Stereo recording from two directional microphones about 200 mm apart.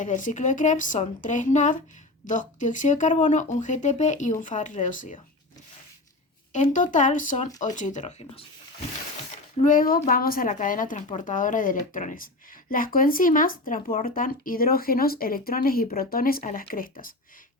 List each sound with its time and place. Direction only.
0.0 s speech: 40° left (ahead or behind)
6.5 s speech: 40° left (ahead or behind)
9.6 s speech: 45° left (ahead or behind)